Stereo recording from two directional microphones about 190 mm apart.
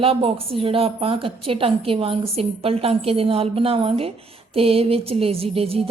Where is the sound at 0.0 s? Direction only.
30° right (ahead or behind).